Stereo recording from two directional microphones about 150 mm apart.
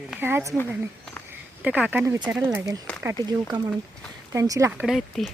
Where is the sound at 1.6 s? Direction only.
10° right (ahead or behind).